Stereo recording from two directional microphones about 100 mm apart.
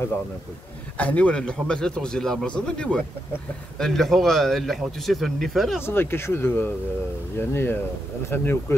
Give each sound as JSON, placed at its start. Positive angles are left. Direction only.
{"t": 0.9, "sound": "speech", "side_deg": 15}
{"t": 5.9, "sound": "speech", "side_deg": 25}